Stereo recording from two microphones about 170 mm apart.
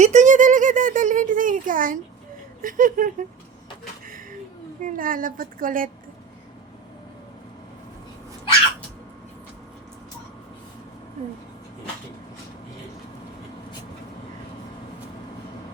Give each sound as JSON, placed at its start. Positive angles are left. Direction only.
{"t": 0.0, "sound": "a woman's voice", "side_deg": -45}
{"t": 4.0, "sound": "a sound", "side_deg": -55}
{"t": 4.8, "sound": "a woman's voice", "side_deg": -55}